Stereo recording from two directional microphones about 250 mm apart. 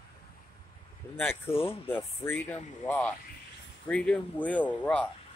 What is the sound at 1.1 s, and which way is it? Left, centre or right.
Speech, centre.